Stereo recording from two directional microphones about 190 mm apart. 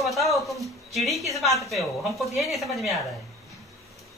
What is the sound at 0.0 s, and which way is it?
Speech, centre (ahead or behind).